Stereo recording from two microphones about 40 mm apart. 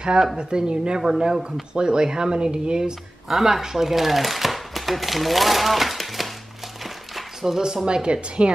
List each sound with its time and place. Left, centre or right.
0.4 s speech: right
3.3 s speech: centre
6.8 s a sound: centre
7.5 s speech: centre